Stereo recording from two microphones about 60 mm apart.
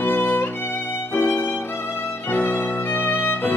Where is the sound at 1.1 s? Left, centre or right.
Left.